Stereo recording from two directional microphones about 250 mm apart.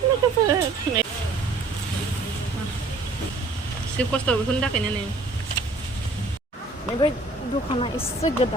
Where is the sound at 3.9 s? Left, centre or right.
Centre.